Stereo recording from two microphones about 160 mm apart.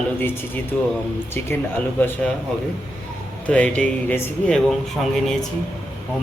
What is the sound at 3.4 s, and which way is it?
Speech, 10° left (ahead or behind).